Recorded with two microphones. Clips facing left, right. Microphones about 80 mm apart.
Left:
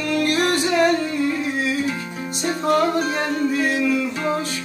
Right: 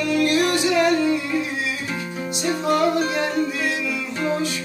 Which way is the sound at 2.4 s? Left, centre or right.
Left.